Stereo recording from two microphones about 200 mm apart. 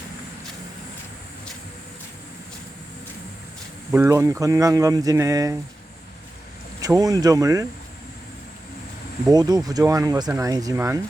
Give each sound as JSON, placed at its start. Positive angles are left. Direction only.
{"t": 3.9, "sound": "speech", "side_deg": -15}
{"t": 6.8, "sound": "speech", "side_deg": -15}
{"t": 9.3, "sound": "speech", "side_deg": -20}